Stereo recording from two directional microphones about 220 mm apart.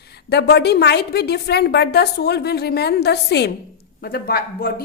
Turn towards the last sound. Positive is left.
turn(degrees=45)  # may be behind; listen again after turning